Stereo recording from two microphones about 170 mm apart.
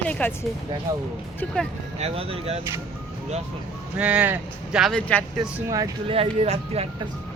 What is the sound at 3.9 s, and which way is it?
Speech, 10° right (ahead or behind).